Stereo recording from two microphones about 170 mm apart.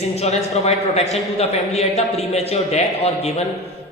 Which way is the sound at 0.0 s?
40° left (ahead or behind).